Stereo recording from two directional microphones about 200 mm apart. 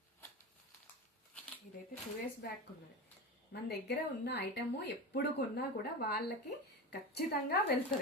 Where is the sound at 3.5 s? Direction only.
55° left (ahead or behind).